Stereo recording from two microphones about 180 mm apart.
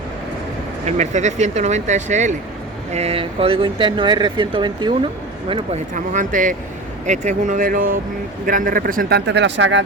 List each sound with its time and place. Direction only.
0.9 s speech: 40° right (ahead or behind)
5.9 s speech: 45° right (ahead or behind); by 9.8 s 90° right